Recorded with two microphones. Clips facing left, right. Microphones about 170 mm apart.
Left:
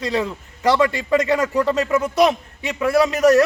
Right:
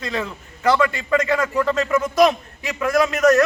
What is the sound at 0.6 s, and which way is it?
Speech, 30° left (ahead or behind).